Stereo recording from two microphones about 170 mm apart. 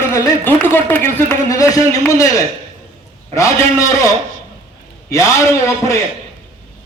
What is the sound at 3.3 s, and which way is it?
Speech, 20° left (ahead or behind).